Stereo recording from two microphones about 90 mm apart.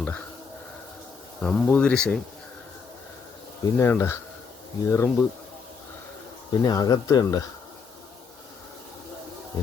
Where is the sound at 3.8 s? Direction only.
30° left (ahead or behind).